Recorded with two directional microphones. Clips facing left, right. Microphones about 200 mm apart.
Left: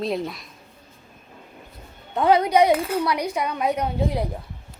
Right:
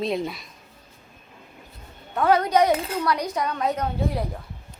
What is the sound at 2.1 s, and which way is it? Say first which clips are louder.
A woman's voice: left 2 dB; 15° left (ahead or behind).